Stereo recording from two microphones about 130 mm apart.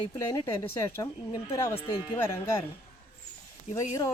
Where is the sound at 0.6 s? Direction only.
20° left (ahead or behind).